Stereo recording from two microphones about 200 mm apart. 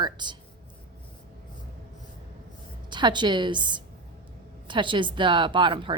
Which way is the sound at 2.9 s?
20° right (ahead or behind).